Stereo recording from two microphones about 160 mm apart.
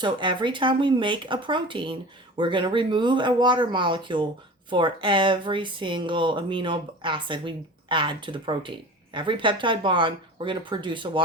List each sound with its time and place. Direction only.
0.0 s speech: 30° right (ahead or behind)